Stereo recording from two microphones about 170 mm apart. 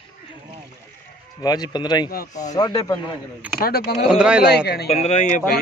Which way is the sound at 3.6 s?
70° left (ahead or behind).